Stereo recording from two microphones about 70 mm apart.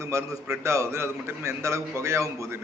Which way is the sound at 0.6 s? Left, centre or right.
Right.